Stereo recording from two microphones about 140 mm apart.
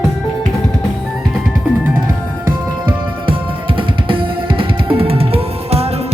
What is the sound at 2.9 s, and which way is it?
Music, 40° right (ahead or behind).